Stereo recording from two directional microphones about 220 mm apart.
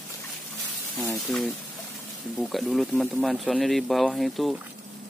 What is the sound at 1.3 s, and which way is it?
Speech, centre (ahead or behind).